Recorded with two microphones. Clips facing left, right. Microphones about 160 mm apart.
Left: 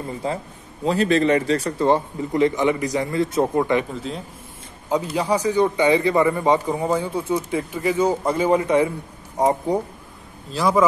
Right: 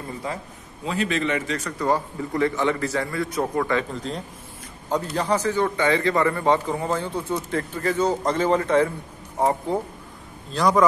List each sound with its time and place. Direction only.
0.2 s a man's voice: 30° left (ahead or behind)
3.9 s a man's voice: 5° left (ahead or behind)
10.5 s speech: 5° left (ahead or behind)